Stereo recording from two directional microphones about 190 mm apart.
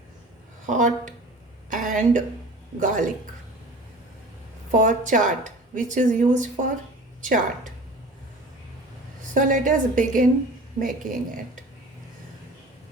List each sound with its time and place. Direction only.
0.7 s speech: 40° right (ahead or behind)
1.7 s a sound: 45° right (ahead or behind)
2.8 s a woman's voice: 45° right (ahead or behind)
4.7 s a woman's voice: 40° right (ahead or behind)
9.3 s a woman's voice: 45° right (ahead or behind)